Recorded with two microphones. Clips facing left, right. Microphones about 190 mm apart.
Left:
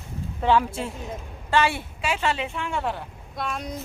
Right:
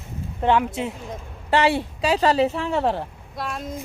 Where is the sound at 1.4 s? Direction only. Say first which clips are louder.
Right 3 dB; 35° right (ahead or behind).